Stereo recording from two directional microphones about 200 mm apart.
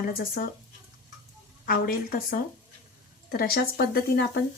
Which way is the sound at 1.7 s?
45° left (ahead or behind).